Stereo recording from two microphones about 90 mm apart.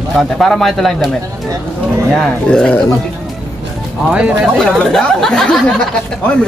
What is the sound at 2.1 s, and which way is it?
Speech, 5° left (ahead or behind).